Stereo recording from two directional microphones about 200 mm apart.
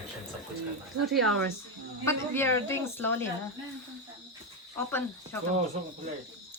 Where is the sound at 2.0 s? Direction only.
10° left (ahead or behind).